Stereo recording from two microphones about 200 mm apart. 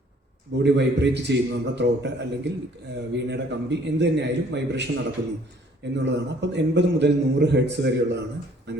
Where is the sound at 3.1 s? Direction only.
60° right (ahead or behind).